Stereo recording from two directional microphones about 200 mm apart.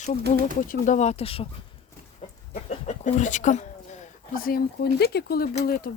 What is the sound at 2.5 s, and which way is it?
Speech, 35° left (ahead or behind).